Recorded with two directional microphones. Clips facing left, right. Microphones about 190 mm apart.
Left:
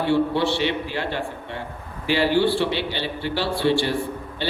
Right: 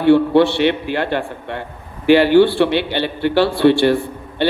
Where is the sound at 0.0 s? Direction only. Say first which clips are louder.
Right 9 dB; 60° right (ahead or behind).